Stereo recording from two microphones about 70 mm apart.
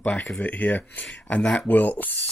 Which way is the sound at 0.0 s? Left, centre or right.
Left.